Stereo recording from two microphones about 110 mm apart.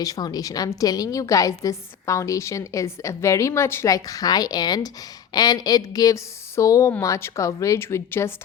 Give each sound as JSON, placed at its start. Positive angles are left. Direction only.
{"t": 0.0, "sound": "a woman's voice", "side_deg": 35}